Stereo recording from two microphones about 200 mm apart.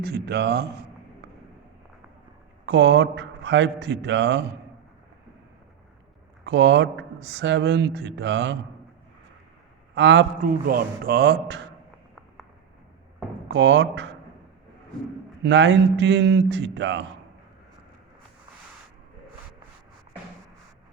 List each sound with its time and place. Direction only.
0.0 s speech: 55° right (ahead or behind)
2.6 s speech: 60° right (ahead or behind)
6.4 s speech: 60° right (ahead or behind)
9.9 s a man's voice: 65° right (ahead or behind)
10.4 s a man's voice: 45° right (ahead or behind)
13.5 s speech: 65° right (ahead or behind)
15.4 s speech: 65° right (ahead or behind)